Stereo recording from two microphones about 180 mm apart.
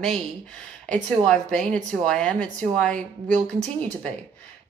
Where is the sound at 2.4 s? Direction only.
45° right (ahead or behind).